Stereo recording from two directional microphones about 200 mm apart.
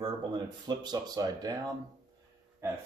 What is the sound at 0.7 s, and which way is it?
Speech, 20° right (ahead or behind).